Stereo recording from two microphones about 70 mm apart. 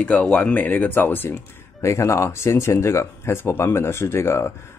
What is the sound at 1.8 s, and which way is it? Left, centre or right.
Speech, left.